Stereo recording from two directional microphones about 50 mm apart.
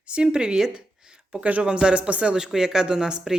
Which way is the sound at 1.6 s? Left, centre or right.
Centre.